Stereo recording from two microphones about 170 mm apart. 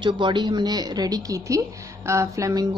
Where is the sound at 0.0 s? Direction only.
25° right (ahead or behind).